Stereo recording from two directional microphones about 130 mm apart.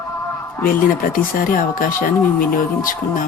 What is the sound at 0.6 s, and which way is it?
Speech, 90° left.